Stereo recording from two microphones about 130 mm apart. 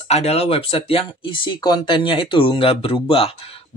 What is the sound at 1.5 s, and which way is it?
Speech, 35° left (ahead or behind).